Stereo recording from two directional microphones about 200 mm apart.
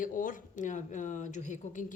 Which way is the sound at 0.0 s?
40° left (ahead or behind).